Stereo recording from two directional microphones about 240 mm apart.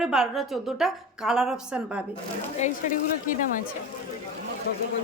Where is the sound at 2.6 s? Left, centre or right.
Left.